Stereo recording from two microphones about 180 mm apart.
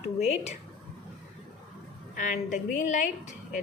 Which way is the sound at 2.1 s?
45° left (ahead or behind).